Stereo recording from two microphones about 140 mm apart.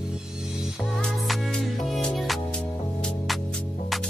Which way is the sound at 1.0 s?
Centre (ahead or behind).